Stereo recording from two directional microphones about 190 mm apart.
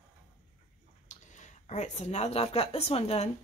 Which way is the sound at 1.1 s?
40° left (ahead or behind).